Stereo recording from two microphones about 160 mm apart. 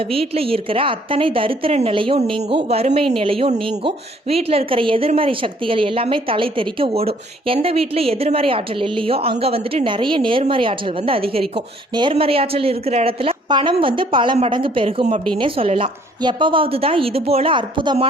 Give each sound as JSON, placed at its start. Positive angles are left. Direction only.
{"t": 0.0, "sound": "a woman's voice", "side_deg": -35}